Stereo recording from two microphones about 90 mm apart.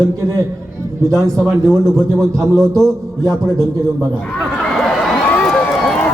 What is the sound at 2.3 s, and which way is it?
Speech, 35° right (ahead or behind).